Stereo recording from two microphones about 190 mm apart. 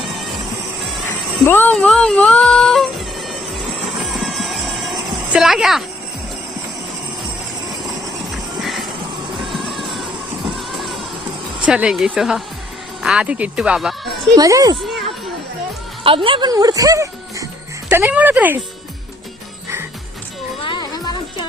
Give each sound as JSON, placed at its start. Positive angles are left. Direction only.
{"t": 1.5, "sound": "music", "side_deg": 10}
{"t": 8.3, "sound": "music", "side_deg": 0}
{"t": 10.5, "sound": "crowd", "side_deg": 0}
{"t": 11.6, "sound": "speech", "side_deg": -5}
{"t": 14.3, "sound": "a child's voice", "side_deg": -20}
{"t": 14.8, "sound": "a child's voice", "side_deg": 0}
{"t": 16.0, "sound": "speech", "side_deg": -25}
{"t": 20.6, "sound": "music", "side_deg": 25}